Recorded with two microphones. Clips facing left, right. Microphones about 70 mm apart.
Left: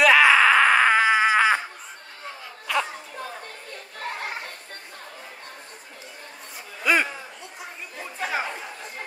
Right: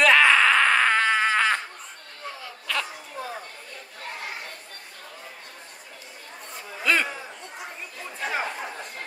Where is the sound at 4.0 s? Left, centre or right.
Left.